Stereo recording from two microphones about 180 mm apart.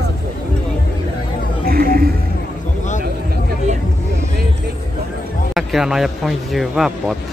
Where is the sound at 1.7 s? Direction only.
55° right (ahead or behind).